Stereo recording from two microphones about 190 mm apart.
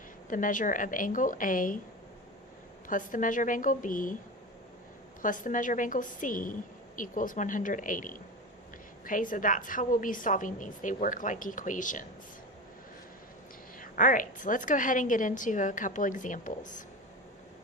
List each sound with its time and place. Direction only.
0.3 s a woman's voice: 45° left (ahead or behind)
2.8 s a woman's voice: 45° left (ahead or behind)
5.2 s a woman's voice: 45° left (ahead or behind)
13.7 s a woman's voice: 45° left (ahead or behind)